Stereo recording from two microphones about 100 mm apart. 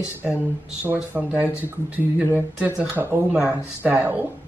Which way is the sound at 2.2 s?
15° right (ahead or behind).